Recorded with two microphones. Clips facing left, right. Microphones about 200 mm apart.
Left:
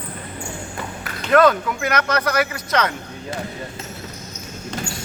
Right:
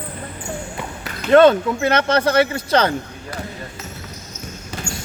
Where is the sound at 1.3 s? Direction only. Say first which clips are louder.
Right 4 dB; 30° right (ahead or behind).